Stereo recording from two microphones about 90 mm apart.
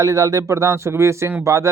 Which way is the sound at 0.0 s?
40° right (ahead or behind).